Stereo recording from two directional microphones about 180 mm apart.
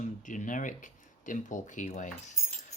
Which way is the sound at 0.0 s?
45° left (ahead or behind).